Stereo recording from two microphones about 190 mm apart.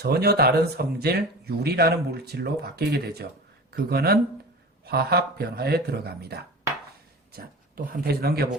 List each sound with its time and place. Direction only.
0.0 s speech: 55° right (ahead or behind)